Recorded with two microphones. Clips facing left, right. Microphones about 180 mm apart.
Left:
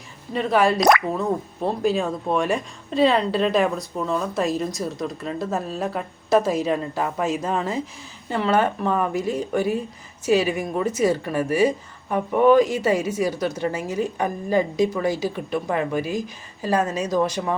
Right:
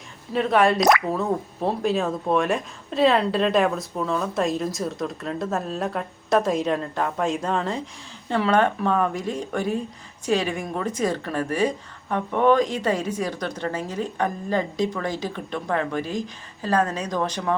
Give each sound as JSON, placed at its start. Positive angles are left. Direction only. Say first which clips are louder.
{"t": 0.3, "sound": "speech", "louder": "even", "side_deg": 0}
{"t": 0.8, "sound": "speech", "louder": "left 1 dB", "side_deg": 55}
{"t": 1.1, "sound": "speech", "louder": "even", "side_deg": 0}